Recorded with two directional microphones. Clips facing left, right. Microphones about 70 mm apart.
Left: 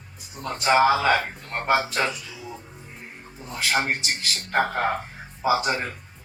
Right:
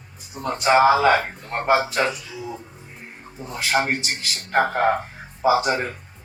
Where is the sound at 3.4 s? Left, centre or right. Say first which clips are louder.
Right 3 dB; right.